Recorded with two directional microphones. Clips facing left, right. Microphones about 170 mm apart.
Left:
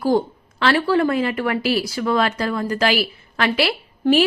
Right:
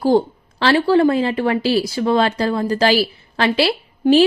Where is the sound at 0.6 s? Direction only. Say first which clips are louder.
Right 4 dB; 30° right (ahead or behind).